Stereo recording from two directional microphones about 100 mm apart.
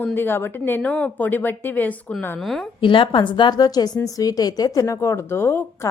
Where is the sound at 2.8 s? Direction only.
55° left (ahead or behind); by 5.8 s 25° left (ahead or behind).